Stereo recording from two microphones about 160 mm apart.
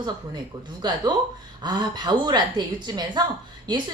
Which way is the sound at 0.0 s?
25° right (ahead or behind).